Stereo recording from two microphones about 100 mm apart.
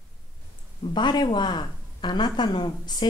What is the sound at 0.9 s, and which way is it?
Speech, 50° left (ahead or behind).